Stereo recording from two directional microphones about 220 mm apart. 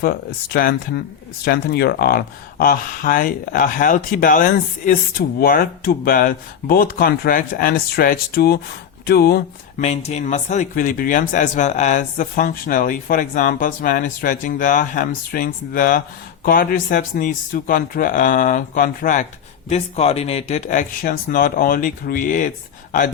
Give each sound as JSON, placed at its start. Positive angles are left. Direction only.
{"t": 0.0, "sound": "speech", "side_deg": 45}
{"t": 9.8, "sound": "speech", "side_deg": 30}